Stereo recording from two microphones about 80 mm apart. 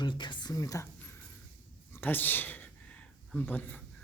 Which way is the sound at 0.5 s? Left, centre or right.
Left.